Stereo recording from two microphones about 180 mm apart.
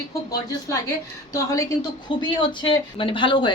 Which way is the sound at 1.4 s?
20° left (ahead or behind).